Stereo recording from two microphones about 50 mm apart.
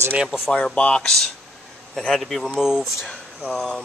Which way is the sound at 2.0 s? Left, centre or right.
Centre.